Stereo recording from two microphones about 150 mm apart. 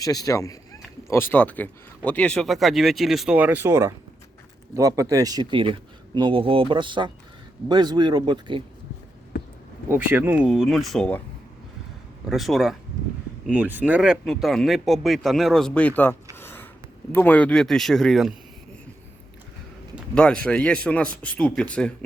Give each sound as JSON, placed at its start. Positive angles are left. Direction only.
{"t": 0.0, "sound": "speech", "side_deg": 25}
{"t": 9.9, "sound": "speech", "side_deg": -15}
{"t": 12.3, "sound": "speech", "side_deg": 0}
{"t": 16.3, "sound": "a sound", "side_deg": 15}
{"t": 17.1, "sound": "speech", "side_deg": 10}
{"t": 20.1, "sound": "a man's voice", "side_deg": 5}